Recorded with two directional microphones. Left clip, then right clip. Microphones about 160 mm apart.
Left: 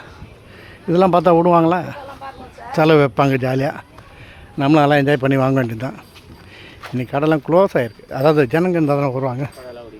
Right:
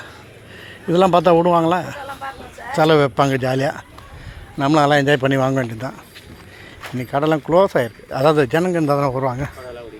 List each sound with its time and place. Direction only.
0.9 s a man's voice: 25° left (ahead or behind)
2.7 s speech: 40° left (ahead or behind)
4.5 s a man's voice: 50° left (ahead or behind)
5.0 s speech: 25° left (ahead or behind)
5.7 s a man's voice: 50° left (ahead or behind)
7.0 s speech: 35° left (ahead or behind)